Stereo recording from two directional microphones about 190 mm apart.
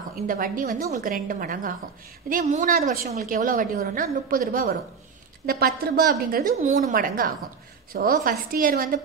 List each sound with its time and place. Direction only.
0.1 s a woman's voice: 45° right (ahead or behind)
5.9 s a woman's voice: 50° right (ahead or behind)